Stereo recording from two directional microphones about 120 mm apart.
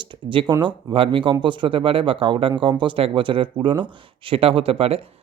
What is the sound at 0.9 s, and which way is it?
Speech, 45° right (ahead or behind).